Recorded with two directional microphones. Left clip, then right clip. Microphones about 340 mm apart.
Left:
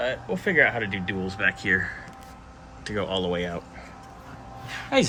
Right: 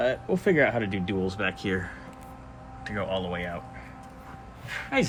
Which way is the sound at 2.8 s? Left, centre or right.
Centre.